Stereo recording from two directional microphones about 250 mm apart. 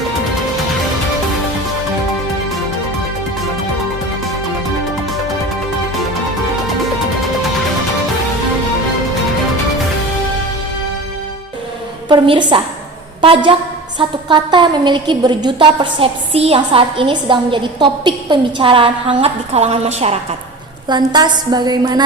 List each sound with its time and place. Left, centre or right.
12.0 s a woman's voice: centre